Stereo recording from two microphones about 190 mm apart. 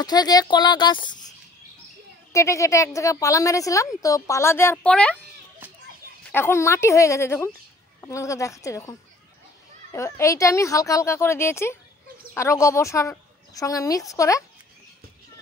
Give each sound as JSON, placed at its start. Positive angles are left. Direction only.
{"t": 0.0, "sound": "speech", "side_deg": 20}
{"t": 2.3, "sound": "a woman's voice", "side_deg": 15}
{"t": 6.3, "sound": "a woman's voice", "side_deg": 15}
{"t": 9.9, "sound": "a woman's voice", "side_deg": 15}